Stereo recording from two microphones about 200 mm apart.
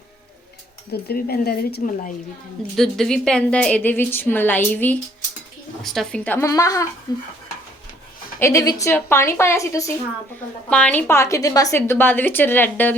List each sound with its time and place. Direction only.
1.0 s speech: 50° left (ahead or behind)
2.7 s a woman's voice: centre (ahead or behind); by 7.2 s 20° left (ahead or behind)
8.4 s a woman's voice: 15° left (ahead or behind)